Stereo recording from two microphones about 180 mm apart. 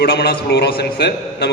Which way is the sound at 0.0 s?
65° left (ahead or behind).